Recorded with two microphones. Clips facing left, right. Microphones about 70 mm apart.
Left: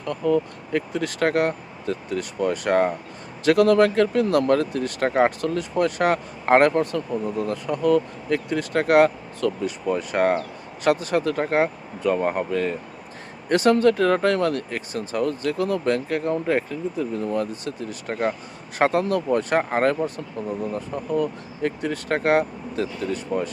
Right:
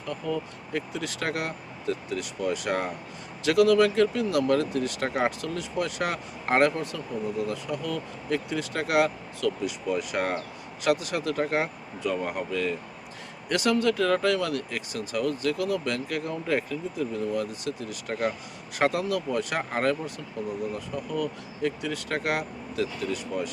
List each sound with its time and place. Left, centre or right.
0.0 s speech: left